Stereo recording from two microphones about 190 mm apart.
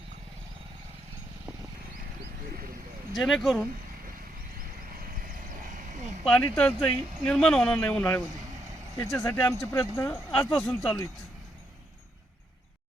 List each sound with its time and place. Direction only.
3.2 s speech: centre (ahead or behind)
5.3 s a sound: 45° right (ahead or behind)
6.2 s speech: 5° left (ahead or behind)